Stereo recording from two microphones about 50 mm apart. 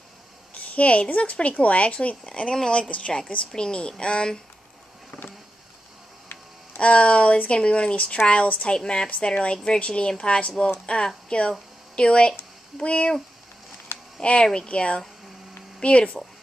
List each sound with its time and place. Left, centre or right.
0.6 s speech: left
6.8 s speech: left
14.2 s speech: left